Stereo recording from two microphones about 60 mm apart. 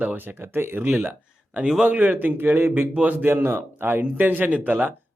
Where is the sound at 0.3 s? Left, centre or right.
Right.